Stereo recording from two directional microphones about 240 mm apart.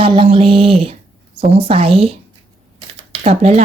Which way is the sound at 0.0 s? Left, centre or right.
Right.